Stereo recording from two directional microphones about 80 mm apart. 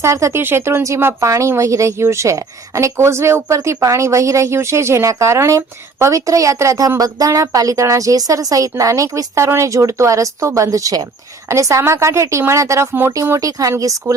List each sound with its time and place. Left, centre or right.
0.0 s a woman's voice: right
13.4 s a woman's voice: right